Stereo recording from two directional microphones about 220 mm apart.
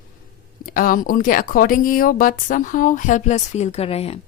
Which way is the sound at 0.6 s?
40° left (ahead or behind).